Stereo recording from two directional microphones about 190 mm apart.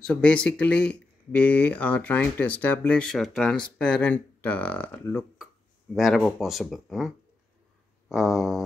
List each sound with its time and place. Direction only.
0.0 s speech: 5° left (ahead or behind)
8.1 s speech: centre (ahead or behind)